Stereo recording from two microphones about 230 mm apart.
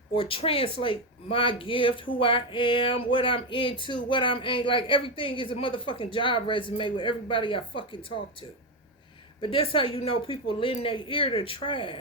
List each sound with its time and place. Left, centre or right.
0.2 s speech: left
9.4 s speech: left